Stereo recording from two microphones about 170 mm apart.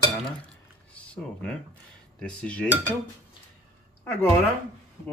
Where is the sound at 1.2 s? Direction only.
5° left (ahead or behind).